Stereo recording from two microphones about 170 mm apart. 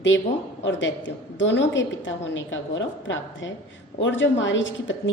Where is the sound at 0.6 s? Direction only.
90° left.